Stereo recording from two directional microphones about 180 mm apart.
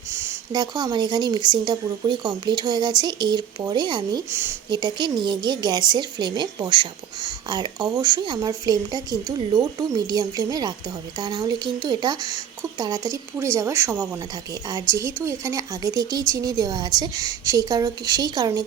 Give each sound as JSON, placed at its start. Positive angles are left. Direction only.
{"t": 0.1, "sound": "a woman's voice", "side_deg": -15}
{"t": 4.3, "sound": "a woman's voice", "side_deg": -15}